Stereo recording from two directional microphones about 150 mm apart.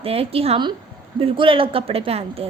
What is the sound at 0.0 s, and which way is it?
A woman's voice, 40° right (ahead or behind).